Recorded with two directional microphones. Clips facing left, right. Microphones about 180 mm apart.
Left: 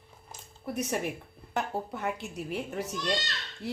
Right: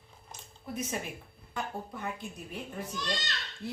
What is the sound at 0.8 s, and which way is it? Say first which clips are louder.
A woman's voice: left 5 dB; 70° left (ahead or behind).